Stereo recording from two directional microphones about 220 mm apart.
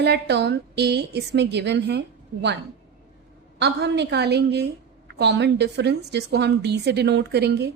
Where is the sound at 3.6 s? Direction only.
50° right (ahead or behind).